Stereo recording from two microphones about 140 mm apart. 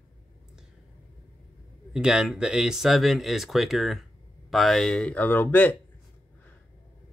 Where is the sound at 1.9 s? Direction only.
5° right (ahead or behind); by 5.7 s 10° left (ahead or behind).